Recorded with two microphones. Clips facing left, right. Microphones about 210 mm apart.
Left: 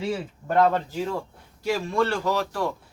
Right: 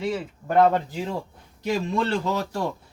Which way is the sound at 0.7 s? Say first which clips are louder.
Even; 15° right (ahead or behind).